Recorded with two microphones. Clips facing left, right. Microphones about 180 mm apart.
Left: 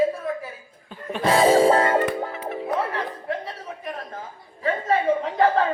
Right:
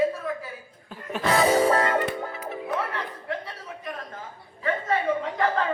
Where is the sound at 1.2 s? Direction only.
25° left (ahead or behind).